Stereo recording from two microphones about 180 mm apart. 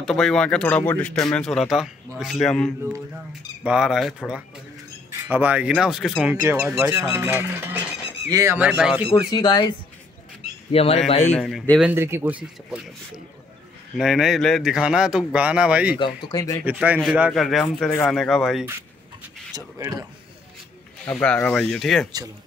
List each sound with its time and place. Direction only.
0.0 s a man's voice: 5° left (ahead or behind)
5.3 s speech: 10° right (ahead or behind)
9.3 s speech: 25° left (ahead or behind)
11.2 s a man's voice: 5° left (ahead or behind)
11.8 s speech: 15° right (ahead or behind)
13.9 s a man's voice: centre (ahead or behind)
16.3 s speech: 20° left (ahead or behind)
16.6 s a man's voice: 10° right (ahead or behind)
19.5 s speech: 20° right (ahead or behind)
21.0 s a man's voice: 10° left (ahead or behind)